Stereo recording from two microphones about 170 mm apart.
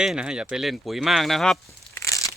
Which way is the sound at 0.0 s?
5° right (ahead or behind).